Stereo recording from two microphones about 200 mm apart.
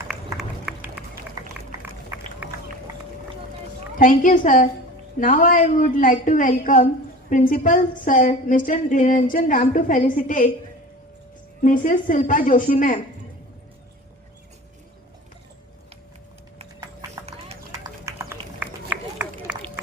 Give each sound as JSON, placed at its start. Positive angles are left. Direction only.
{"t": 0.1, "sound": "run", "side_deg": 0}
{"t": 3.9, "sound": "a woman's voice", "side_deg": 40}
{"t": 11.6, "sound": "a woman's voice", "side_deg": 40}
{"t": 17.7, "sound": "run", "side_deg": -15}